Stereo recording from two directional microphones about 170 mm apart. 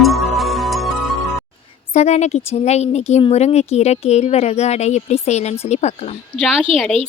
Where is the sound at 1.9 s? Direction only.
40° left (ahead or behind).